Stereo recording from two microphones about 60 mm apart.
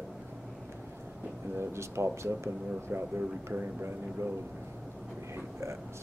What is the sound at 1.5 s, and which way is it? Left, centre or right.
Speech, right.